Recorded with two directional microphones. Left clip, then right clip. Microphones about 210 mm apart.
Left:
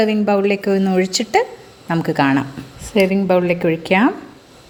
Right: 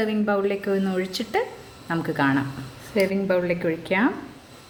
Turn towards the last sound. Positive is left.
turn(degrees=35)  # may be behind; listen again after turning